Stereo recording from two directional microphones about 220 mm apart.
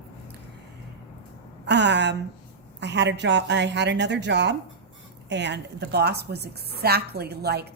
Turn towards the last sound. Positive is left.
turn(degrees=-45)  # may be behind; listen again after turning